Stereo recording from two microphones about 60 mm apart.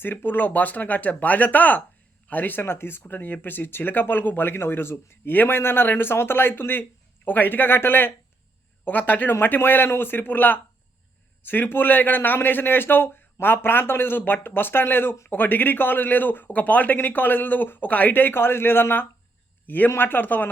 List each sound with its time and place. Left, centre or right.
0.0 s a man's voice: left